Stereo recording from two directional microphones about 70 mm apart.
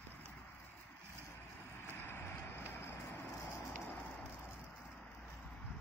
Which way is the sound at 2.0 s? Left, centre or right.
Left.